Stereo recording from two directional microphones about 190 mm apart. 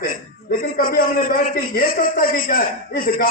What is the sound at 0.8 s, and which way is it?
A man's voice, 50° left (ahead or behind).